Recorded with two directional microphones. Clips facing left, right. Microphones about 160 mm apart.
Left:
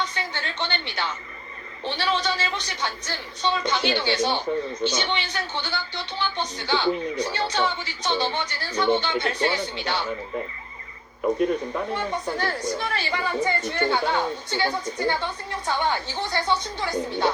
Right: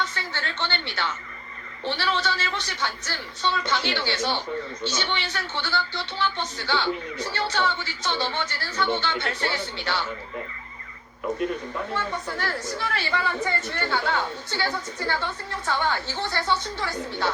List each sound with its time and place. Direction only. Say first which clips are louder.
0.0 s a woman's voice: left 1 dB; 15° left (ahead or behind)
11.9 s a woman's voice: left 3 dB; 20° left (ahead or behind)